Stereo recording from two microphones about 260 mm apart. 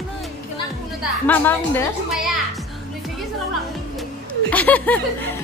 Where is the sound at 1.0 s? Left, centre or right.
Centre.